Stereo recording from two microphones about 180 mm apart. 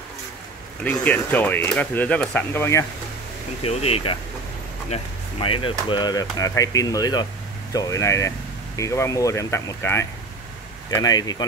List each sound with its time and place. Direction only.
0.8 s speech: 10° left (ahead or behind)
3.6 s speech: 35° left (ahead or behind)